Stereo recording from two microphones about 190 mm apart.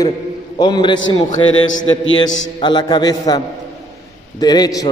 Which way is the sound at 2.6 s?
25° left (ahead or behind).